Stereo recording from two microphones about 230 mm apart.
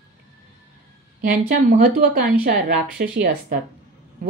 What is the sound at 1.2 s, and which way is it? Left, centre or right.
Speech, right.